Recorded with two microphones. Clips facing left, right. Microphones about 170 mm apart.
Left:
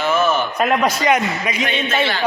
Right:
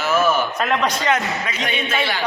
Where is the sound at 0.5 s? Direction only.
10° left (ahead or behind).